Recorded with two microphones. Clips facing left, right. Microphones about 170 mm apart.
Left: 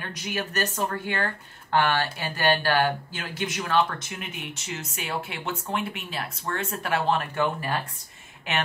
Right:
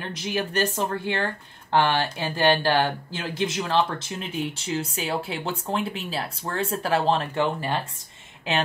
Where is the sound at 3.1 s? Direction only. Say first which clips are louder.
Right 4 dB; 30° right (ahead or behind).